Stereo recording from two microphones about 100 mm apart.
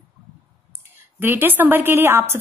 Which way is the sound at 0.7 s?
20° right (ahead or behind).